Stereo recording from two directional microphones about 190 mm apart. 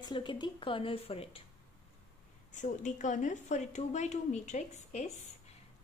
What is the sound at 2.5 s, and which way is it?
Speech, 40° left (ahead or behind).